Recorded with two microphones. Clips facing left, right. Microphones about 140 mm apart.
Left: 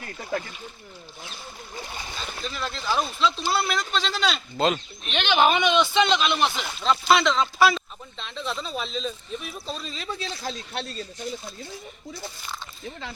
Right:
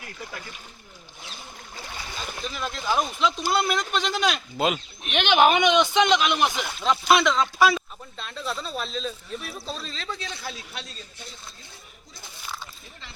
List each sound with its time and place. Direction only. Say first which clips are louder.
0.2 s speech: left 10 dB; 40° left (ahead or behind)
2.1 s speech: even; 10° right (ahead or behind); by 10.1 s 10° left (ahead or behind)